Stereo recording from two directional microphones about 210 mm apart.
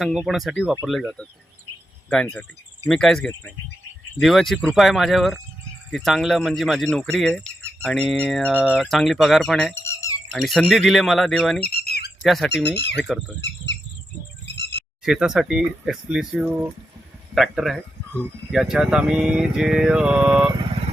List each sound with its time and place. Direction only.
0.0 s speech: centre (ahead or behind)
8.5 s speech: 5° right (ahead or behind)
9.8 s a sound: 15° left (ahead or behind)
10.3 s speech: centre (ahead or behind)
11.6 s bird: 50° left (ahead or behind)
12.2 s speech: centre (ahead or behind)
12.6 s speech: 55° left (ahead or behind)
13.0 s speech: 5° right (ahead or behind)
14.4 s a sound: 55° left (ahead or behind)
15.0 s speech: 5° right (ahead or behind)